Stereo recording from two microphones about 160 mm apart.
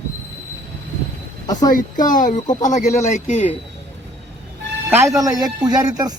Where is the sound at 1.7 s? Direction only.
55° left (ahead or behind).